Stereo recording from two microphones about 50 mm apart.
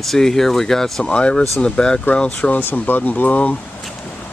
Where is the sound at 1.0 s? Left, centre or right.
Centre.